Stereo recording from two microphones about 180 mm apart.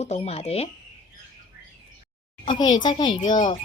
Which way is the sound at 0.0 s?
35° left (ahead or behind).